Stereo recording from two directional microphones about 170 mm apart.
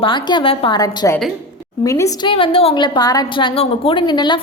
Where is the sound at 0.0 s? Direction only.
30° left (ahead or behind).